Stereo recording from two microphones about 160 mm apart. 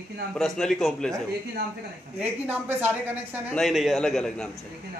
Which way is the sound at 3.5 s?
Centre (ahead or behind).